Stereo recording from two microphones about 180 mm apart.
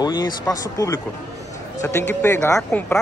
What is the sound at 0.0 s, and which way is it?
Speech, 20° left (ahead or behind).